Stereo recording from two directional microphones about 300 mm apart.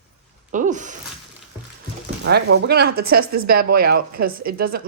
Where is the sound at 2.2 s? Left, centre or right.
Right.